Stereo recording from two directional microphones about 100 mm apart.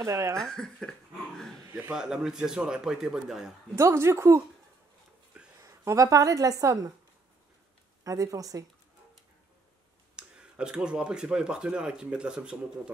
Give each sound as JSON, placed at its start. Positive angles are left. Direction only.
{"t": 0.0, "sound": "a woman's voice", "side_deg": -30}
{"t": 0.4, "sound": "a sound", "side_deg": 5}
{"t": 1.7, "sound": "a man's voice", "side_deg": -20}
{"t": 2.0, "sound": "speech", "side_deg": -5}
{"t": 3.7, "sound": "a woman's voice", "side_deg": -25}
{"t": 5.6, "sound": "a woman's voice", "side_deg": -35}
{"t": 8.0, "sound": "speech", "side_deg": -35}
{"t": 10.1, "sound": "speech", "side_deg": -10}